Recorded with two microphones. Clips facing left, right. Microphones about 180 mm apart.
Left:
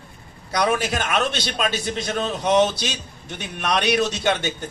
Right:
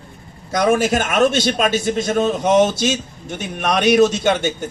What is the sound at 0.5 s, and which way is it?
A man's voice, 50° right (ahead or behind).